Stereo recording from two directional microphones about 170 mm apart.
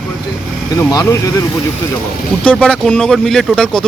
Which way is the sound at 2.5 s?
5° left (ahead or behind).